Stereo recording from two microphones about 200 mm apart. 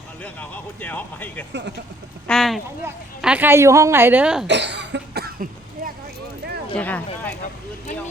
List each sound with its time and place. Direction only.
0.2 s speech: 10° left (ahead or behind)
1.5 s speech: 60° right (ahead or behind)
2.2 s a woman's voice: centre (ahead or behind)
4.4 s cough: 60° right (ahead or behind)
6.7 s speech: 5° left (ahead or behind)